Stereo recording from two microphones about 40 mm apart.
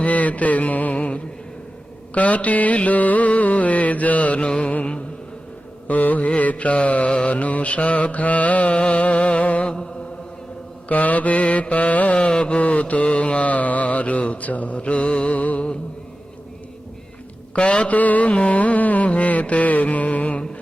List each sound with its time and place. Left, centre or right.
0.0 s mantra: left
5.9 s mantra: left
9.6 s chant: centre
10.8 s mantra: left
12.2 s mantra: left
15.4 s music: left
17.5 s mantra: left
17.9 s mantra: left